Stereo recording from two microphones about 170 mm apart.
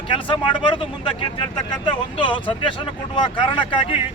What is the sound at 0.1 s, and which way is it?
Speech, 30° left (ahead or behind).